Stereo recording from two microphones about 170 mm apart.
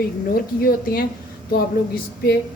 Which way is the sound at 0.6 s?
65° left (ahead or behind).